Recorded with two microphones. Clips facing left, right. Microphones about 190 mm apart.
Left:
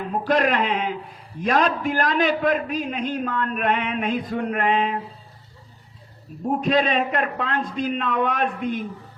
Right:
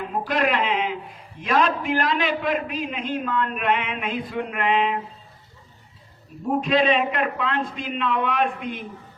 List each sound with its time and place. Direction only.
0.1 s a sound: 45° left (ahead or behind)
1.4 s a man's voice: 45° left (ahead or behind)
6.6 s a man's voice: 40° left (ahead or behind)